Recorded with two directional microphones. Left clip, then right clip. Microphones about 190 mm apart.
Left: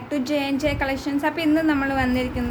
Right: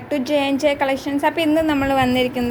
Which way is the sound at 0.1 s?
20° right (ahead or behind).